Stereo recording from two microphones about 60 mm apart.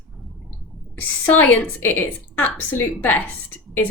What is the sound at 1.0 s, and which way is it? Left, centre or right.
A woman's voice, left.